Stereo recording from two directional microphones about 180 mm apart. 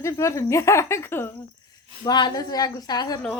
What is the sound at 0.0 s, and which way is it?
Speech, 15° left (ahead or behind).